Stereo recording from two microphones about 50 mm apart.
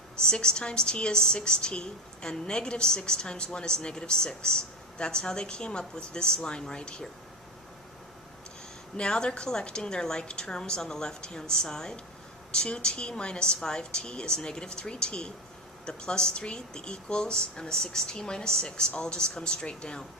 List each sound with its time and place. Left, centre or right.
0.2 s a woman's voice: centre
9.0 s a woman's voice: centre